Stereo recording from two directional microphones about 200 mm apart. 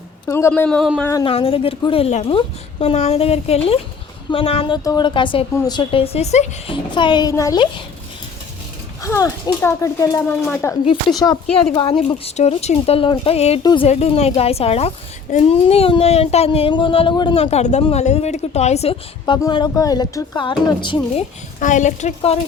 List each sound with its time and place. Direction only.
0.3 s speech: 15° left (ahead or behind)
1.2 s a woman's voice: 30° left (ahead or behind)
6.9 s a woman's voice: 20° left (ahead or behind)
9.0 s a woman's voice: 15° left (ahead or behind)
21.6 s speech: 40° left (ahead or behind)